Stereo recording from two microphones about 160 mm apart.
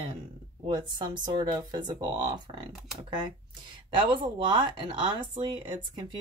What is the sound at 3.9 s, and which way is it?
Speech, 30° right (ahead or behind).